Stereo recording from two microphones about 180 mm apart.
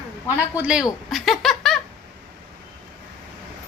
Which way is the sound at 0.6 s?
5° right (ahead or behind).